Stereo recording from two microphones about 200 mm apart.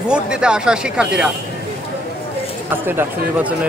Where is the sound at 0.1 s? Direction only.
5° right (ahead or behind).